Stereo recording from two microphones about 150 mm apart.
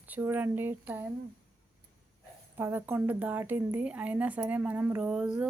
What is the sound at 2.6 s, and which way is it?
Speech, 15° right (ahead or behind).